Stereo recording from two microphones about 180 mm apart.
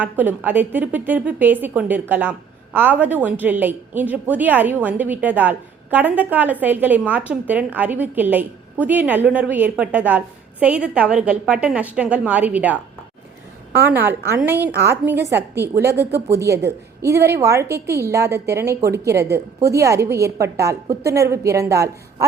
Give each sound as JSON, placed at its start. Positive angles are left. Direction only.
{"t": 0.0, "sound": "a woman's voice", "side_deg": -10}